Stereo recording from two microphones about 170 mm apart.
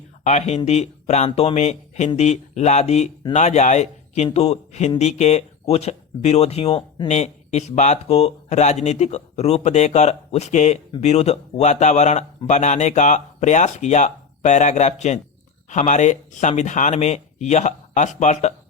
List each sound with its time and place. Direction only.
0.3 s a man's voice: 40° left (ahead or behind)